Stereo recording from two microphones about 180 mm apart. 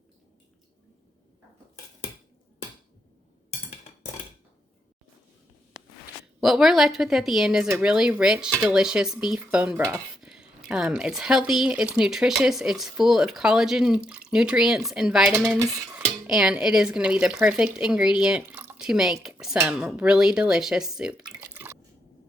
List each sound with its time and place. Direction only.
6.4 s speech: centre (ahead or behind)